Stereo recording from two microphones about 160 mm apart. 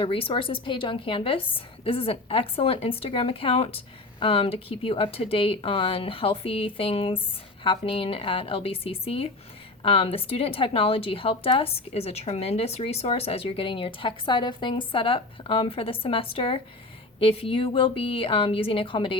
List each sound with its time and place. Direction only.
0.0 s a woman's voice: 35° left (ahead or behind)